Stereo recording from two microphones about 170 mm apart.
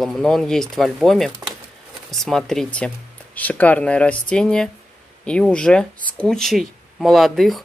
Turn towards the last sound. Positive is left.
turn(degrees=0)  # may be behind; listen again after turning